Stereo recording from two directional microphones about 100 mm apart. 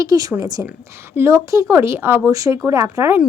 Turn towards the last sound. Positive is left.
turn(degrees=-25)  # may be behind; listen again after turning